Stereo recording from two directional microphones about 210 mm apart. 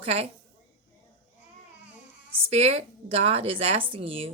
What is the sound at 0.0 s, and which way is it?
Speech, 30° right (ahead or behind).